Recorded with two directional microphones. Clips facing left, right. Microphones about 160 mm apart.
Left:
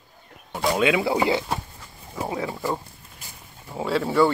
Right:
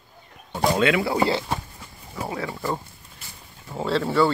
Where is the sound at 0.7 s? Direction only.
15° left (ahead or behind).